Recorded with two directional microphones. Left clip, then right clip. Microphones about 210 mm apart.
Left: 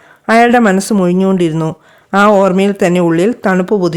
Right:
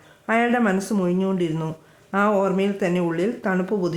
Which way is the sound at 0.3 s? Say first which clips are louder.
Left 12 dB; 45° left (ahead or behind).